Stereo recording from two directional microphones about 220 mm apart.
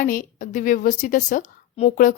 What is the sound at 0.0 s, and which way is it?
A woman's voice, 40° left (ahead or behind).